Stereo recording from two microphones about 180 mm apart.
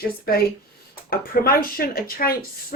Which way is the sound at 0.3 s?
55° left (ahead or behind).